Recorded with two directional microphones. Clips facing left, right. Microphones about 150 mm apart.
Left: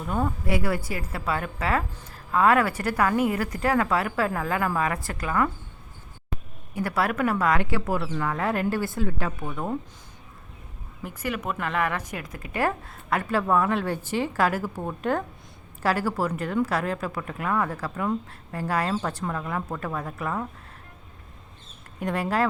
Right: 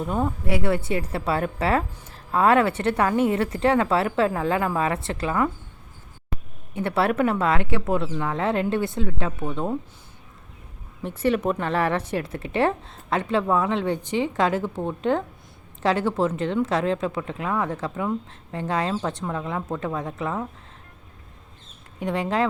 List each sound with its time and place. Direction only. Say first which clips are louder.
0.1 s speech: even; 15° right (ahead or behind)
0.4 s speech: right 3 dB; 30° right (ahead or behind)
6.7 s speech: right 3 dB; 25° right (ahead or behind)
11.0 s speech: right 8 dB; 30° right (ahead or behind)
22.0 s speech: right 1 dB; 15° right (ahead or behind)